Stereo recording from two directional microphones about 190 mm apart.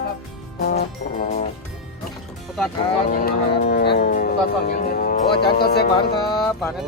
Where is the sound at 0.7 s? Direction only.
55° left (ahead or behind).